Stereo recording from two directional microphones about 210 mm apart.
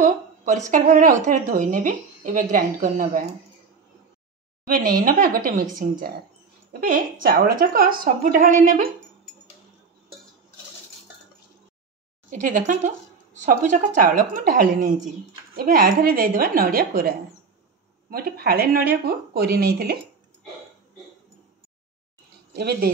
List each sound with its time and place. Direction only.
0.0 s speech: 35° right (ahead or behind)
4.6 s speech: 40° right (ahead or behind)
7.2 s speech: 45° right (ahead or behind)
12.3 s speech: 40° right (ahead or behind)
18.1 s speech: 45° right (ahead or behind)
22.6 s speech: 50° right (ahead or behind)